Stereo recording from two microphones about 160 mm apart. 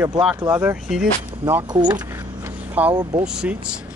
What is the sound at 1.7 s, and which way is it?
Speech, 25° right (ahead or behind).